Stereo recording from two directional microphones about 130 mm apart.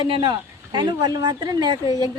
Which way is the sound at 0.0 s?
40° right (ahead or behind).